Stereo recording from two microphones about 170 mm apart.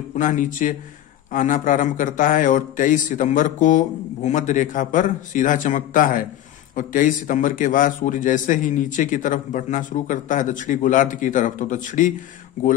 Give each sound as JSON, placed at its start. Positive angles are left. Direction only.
{"t": 0.1, "sound": "a man's voice", "side_deg": 50}